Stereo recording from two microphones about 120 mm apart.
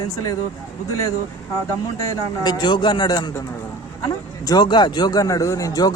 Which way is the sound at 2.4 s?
35° left (ahead or behind).